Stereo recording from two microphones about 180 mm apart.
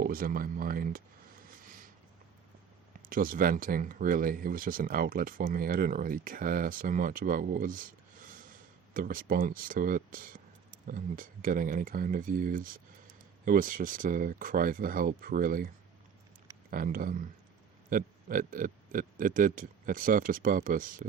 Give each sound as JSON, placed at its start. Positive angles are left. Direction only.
{"t": 0.0, "sound": "speech", "side_deg": -55}
{"t": 1.5, "sound": "a sound", "side_deg": -50}
{"t": 3.1, "sound": "speech", "side_deg": -50}